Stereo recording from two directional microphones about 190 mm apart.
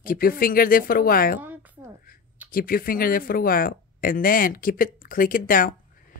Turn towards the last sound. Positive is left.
turn(degrees=45)  # may be behind; listen again after turning